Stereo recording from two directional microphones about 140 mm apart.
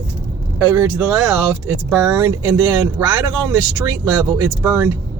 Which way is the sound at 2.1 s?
20° right (ahead or behind).